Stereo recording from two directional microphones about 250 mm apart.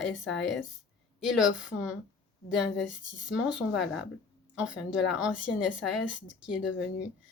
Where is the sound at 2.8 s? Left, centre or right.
Left.